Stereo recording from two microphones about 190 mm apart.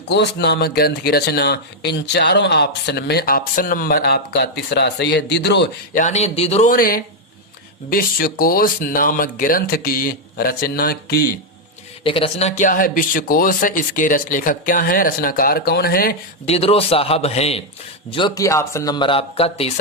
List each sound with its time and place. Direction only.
0.1 s speech: 65° left (ahead or behind)
5.9 s a man's voice: 40° left (ahead or behind)
12.0 s speech: 30° left (ahead or behind); by 16.1 s 50° left (ahead or behind)
16.5 s a man's voice: 30° left (ahead or behind)